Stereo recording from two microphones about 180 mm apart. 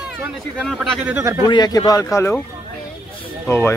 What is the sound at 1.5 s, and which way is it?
Speech, 20° left (ahead or behind).